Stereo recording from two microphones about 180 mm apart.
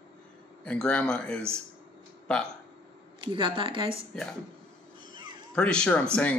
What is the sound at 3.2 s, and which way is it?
Speech, 30° right (ahead or behind).